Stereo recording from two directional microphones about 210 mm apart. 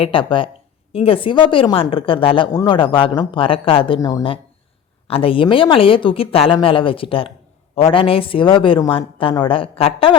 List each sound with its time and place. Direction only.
0.0 s a woman's voice: 25° left (ahead or behind)